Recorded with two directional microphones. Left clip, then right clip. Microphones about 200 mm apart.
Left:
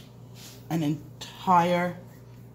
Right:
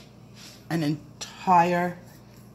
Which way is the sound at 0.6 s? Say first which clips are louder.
Right 1 dB; 15° right (ahead or behind).